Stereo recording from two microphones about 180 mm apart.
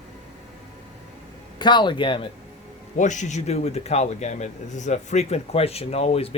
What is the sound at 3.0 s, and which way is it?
A man's voice, 40° left (ahead or behind).